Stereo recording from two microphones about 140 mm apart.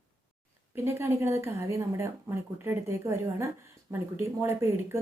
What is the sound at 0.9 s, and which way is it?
A woman's voice, 20° right (ahead or behind).